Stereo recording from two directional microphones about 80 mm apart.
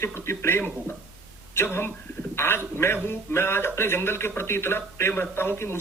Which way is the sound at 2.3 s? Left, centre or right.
Left.